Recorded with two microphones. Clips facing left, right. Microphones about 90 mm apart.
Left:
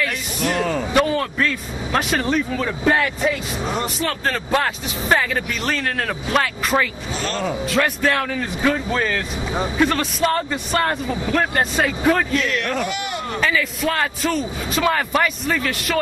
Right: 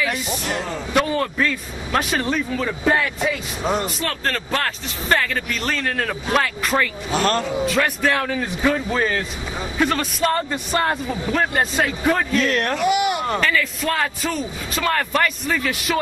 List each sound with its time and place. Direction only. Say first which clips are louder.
0.4 s music: left 5 dB; 55° left (ahead or behind)
0.9 s a man's voice: even; 5° right (ahead or behind)
7.2 s a man's voice: right 6 dB; 50° right (ahead or behind)
7.6 s a man's voice: left 2 dB; centre (ahead or behind)
9.8 s a man's voice: even; centre (ahead or behind)
12.4 s speech: right 2 dB; 40° right (ahead or behind)
12.8 s speech: right 7 dB; 10° right (ahead or behind)
13.4 s a man's voice: left 1 dB; 5° left (ahead or behind)